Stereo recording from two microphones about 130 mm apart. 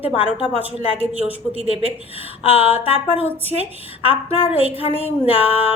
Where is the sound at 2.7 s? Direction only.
15° right (ahead or behind).